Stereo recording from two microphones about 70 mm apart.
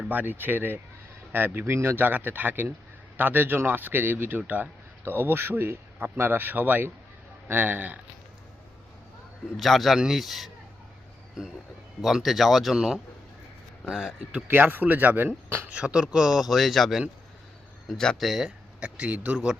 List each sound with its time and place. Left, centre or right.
0.1 s speech: right
9.6 s speech: centre
12.0 s speech: centre
14.4 s speech: right
15.7 s speech: centre
18.8 s speech: centre